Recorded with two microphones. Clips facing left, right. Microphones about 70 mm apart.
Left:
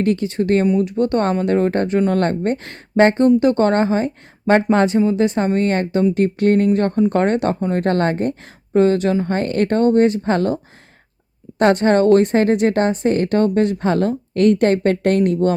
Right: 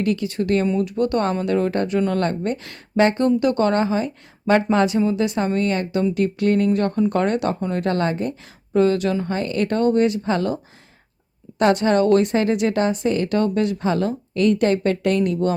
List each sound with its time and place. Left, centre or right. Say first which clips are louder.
0.0 s a woman's voice: left 4 dB; left
11.6 s a woman's voice: left 3 dB; left